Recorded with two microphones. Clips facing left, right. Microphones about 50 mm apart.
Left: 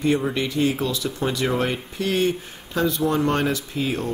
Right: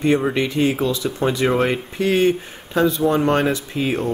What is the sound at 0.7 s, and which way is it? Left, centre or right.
Speech, right.